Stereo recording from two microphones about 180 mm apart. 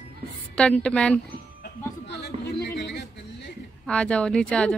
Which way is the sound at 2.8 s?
70° left (ahead or behind).